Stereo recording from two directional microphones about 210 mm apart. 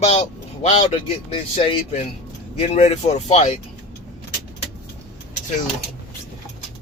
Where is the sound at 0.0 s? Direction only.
30° left (ahead or behind).